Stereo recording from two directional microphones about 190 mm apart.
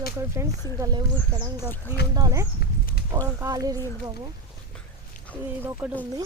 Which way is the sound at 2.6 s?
60° left (ahead or behind).